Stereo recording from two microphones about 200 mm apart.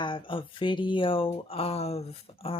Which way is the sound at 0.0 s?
25° left (ahead or behind).